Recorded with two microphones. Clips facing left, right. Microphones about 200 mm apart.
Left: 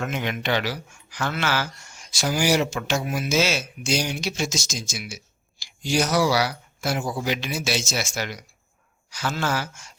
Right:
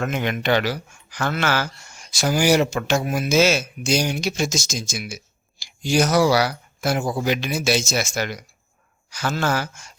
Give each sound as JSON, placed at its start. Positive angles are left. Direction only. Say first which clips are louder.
{"t": 0.0, "sound": "speech", "louder": "right 4 dB", "side_deg": -50}